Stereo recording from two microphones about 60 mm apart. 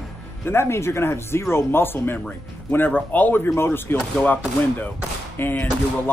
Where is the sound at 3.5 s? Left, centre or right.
Left.